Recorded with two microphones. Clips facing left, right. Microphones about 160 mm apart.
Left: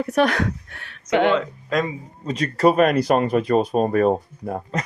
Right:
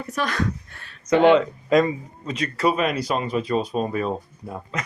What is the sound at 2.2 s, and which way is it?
Speech, 40° left (ahead or behind).